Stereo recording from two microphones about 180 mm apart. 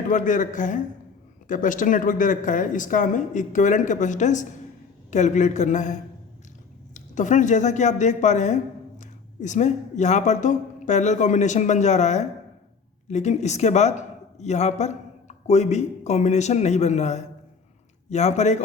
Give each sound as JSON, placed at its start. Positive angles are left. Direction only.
{"t": 0.1, "sound": "a woman's voice", "side_deg": 45}